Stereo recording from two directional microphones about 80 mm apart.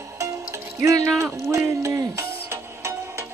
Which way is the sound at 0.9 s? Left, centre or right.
Right.